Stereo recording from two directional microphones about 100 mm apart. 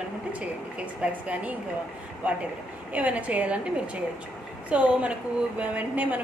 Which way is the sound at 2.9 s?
15° right (ahead or behind).